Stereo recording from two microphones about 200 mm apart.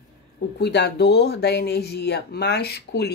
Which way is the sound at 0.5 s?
55° left (ahead or behind).